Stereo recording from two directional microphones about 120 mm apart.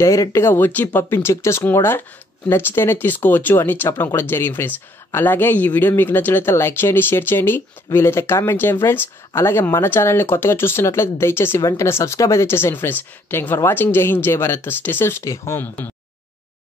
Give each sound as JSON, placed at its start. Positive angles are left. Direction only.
{"t": 0.0, "sound": "speech", "side_deg": 25}